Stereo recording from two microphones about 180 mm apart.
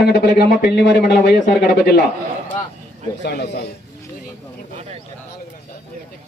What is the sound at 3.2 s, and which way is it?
Speech, 65° left (ahead or behind).